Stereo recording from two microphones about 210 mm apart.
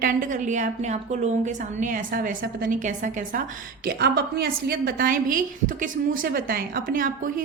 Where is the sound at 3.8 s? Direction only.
50° right (ahead or behind).